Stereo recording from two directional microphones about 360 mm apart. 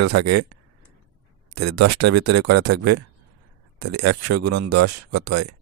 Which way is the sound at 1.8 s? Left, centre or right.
Right.